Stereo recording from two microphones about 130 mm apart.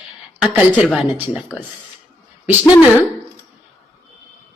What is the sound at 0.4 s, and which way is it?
Speech, 10° right (ahead or behind).